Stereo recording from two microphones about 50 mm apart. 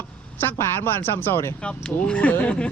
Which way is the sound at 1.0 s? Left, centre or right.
Left.